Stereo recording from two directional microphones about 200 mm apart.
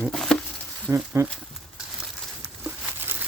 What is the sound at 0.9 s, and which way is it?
Speech, 15° right (ahead or behind).